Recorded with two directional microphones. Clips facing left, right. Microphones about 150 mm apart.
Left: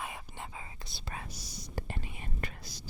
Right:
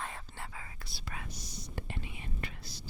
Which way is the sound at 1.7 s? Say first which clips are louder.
Left 3 dB; 40° left (ahead or behind).